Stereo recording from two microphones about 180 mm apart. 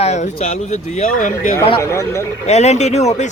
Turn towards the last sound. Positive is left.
turn(degrees=40)  # may be behind; listen again after turning